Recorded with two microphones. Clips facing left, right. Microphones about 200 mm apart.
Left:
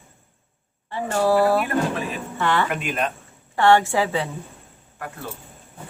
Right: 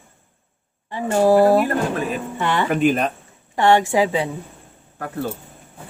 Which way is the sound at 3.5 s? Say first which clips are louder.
Right 1 dB; 15° right (ahead or behind).